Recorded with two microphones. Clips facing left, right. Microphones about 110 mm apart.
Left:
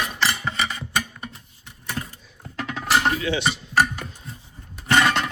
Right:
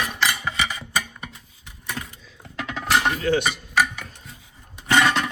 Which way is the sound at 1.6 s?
Centre (ahead or behind).